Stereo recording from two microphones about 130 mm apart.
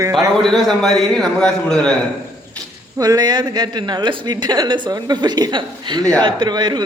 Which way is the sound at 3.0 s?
30° right (ahead or behind).